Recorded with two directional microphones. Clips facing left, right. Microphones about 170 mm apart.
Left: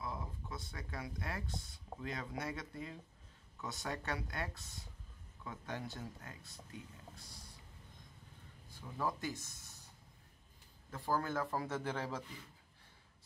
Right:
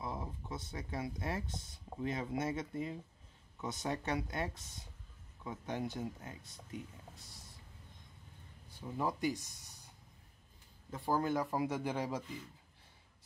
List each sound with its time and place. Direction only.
0.0 s speech: 25° right (ahead or behind)
8.8 s speech: 20° right (ahead or behind)
10.9 s speech: 20° right (ahead or behind)